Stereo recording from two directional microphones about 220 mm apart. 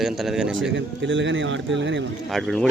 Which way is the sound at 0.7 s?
55° right (ahead or behind).